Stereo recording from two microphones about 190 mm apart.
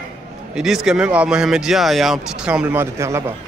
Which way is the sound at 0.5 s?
Centre (ahead or behind).